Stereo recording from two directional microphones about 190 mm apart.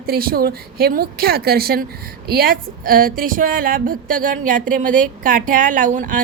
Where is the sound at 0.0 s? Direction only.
50° right (ahead or behind).